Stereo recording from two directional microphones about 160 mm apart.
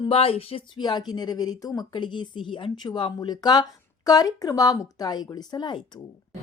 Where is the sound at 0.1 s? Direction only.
35° left (ahead or behind).